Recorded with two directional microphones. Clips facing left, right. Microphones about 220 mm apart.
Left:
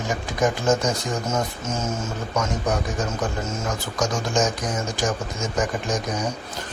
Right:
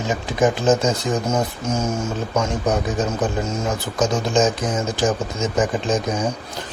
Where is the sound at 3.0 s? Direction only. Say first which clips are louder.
Right 5 dB; 20° right (ahead or behind).